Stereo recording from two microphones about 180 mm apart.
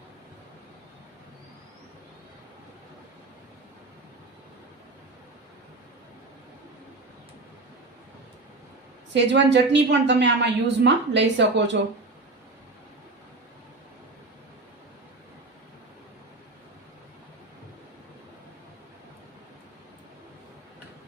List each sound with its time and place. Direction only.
9.1 s a woman's voice: 75° right (ahead or behind)